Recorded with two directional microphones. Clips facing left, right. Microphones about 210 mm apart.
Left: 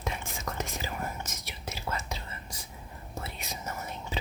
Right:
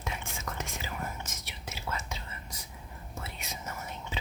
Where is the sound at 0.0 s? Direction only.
35° left (ahead or behind).